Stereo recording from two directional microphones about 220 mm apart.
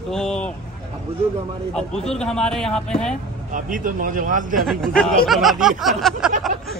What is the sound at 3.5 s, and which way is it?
A man's voice, 35° right (ahead or behind).